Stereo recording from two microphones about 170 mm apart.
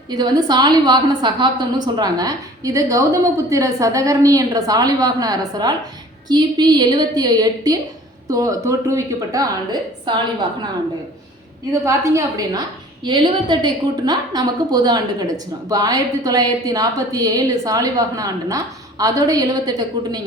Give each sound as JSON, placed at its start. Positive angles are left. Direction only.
{"t": 0.1, "sound": "a woman's voice", "side_deg": -25}
{"t": 11.7, "sound": "a woman's voice", "side_deg": -20}